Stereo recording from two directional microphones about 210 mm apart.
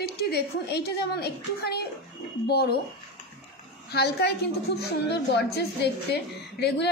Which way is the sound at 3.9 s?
50° left (ahead or behind).